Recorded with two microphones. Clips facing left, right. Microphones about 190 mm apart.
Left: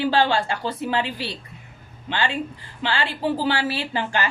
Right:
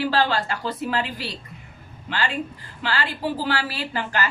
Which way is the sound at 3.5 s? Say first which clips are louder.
Left 2 dB; 25° left (ahead or behind).